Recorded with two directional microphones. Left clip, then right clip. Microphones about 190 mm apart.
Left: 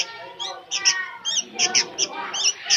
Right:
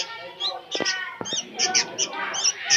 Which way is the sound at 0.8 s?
Centre (ahead or behind).